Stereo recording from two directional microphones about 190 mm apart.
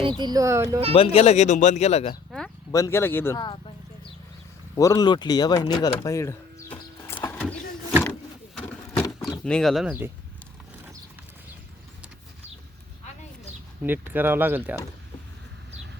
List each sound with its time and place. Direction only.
0.0 s speech: 25° right (ahead or behind)
0.9 s speech: 30° left (ahead or behind)
2.7 s speech: 15° left (ahead or behind)
4.8 s speech: 20° left (ahead or behind)
8.5 s a sound: 15° left (ahead or behind)
9.4 s speech: 5° left (ahead or behind)
13.8 s speech: 10° right (ahead or behind)